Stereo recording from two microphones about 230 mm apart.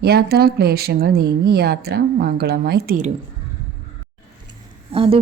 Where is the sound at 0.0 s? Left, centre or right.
Right.